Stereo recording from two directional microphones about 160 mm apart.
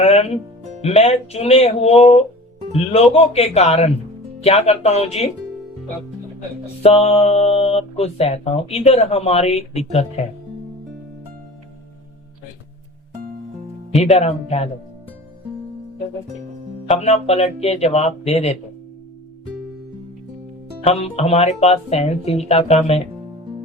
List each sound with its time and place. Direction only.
0.0 s speech: 40° left (ahead or behind)
6.8 s speech: 40° left (ahead or behind)
14.0 s speech: 40° left (ahead or behind)
16.9 s speech: 40° left (ahead or behind)
20.8 s speech: 40° left (ahead or behind)